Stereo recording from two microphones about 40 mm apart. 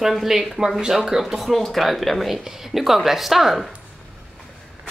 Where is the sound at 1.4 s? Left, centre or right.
Centre.